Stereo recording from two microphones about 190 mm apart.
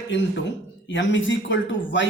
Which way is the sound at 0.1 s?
75° left (ahead or behind).